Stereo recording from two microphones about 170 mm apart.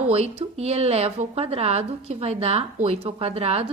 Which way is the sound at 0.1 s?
35° right (ahead or behind).